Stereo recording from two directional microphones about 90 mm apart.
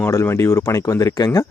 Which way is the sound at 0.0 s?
30° left (ahead or behind).